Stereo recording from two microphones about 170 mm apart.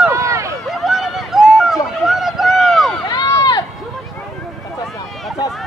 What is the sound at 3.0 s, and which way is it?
Run, 20° left (ahead or behind).